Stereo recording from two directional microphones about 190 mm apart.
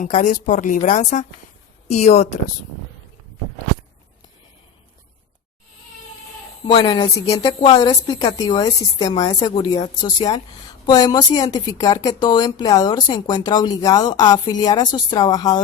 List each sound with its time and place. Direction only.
0.0 s a woman's voice: 40° left (ahead or behind)
6.7 s speech: 25° left (ahead or behind)